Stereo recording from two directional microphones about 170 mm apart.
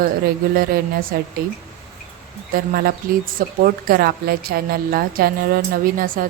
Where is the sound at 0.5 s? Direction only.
60° right (ahead or behind).